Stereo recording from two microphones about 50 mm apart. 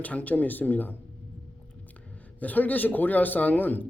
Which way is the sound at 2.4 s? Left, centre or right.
Left.